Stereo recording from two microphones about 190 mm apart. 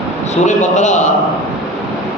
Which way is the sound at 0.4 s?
40° left (ahead or behind).